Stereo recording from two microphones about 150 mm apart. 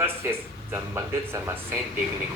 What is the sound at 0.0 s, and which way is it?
Speech, 15° right (ahead or behind).